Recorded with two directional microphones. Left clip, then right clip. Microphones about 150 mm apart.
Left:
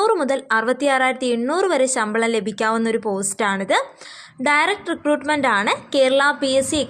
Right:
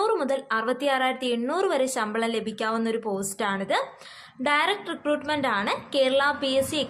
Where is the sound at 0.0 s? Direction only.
40° left (ahead or behind).